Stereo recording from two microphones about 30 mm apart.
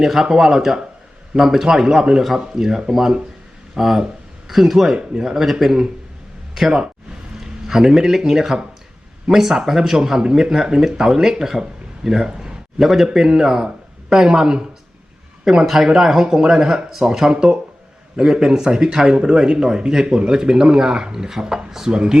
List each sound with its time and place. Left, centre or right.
0.0 s speech: centre
7.3 s a man's voice: centre
12.8 s a man's voice: centre
13.1 s speech: centre
14.3 s speech: right
15.6 s speech: centre
19.0 s speech: right; by 21.9 s centre
21.9 s speech: right